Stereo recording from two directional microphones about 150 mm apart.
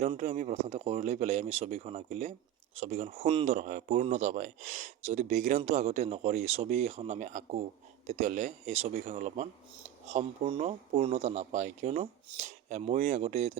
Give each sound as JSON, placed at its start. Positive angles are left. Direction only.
{"t": 0.2, "sound": "speech", "side_deg": -50}
{"t": 3.4, "sound": "speech", "side_deg": -50}